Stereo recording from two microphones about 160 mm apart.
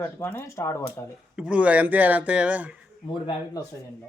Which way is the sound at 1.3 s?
5° right (ahead or behind).